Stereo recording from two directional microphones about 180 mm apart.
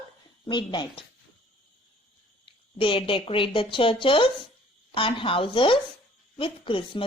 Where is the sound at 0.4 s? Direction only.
25° left (ahead or behind).